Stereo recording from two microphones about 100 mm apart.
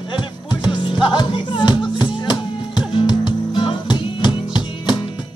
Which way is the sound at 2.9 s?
50° left (ahead or behind).